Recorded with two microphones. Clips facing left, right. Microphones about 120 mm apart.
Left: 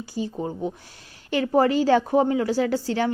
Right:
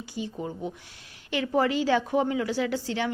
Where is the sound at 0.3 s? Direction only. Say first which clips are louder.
Left 5 dB; 35° left (ahead or behind).